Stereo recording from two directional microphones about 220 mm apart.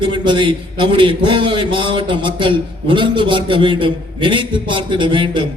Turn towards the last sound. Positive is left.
turn(degrees=-20)  # may be behind; listen again after turning